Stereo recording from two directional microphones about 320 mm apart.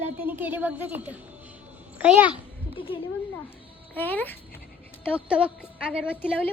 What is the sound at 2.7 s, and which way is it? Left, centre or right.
Speech, centre.